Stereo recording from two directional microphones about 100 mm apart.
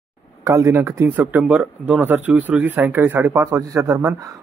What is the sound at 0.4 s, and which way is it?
A man's voice, 30° right (ahead or behind).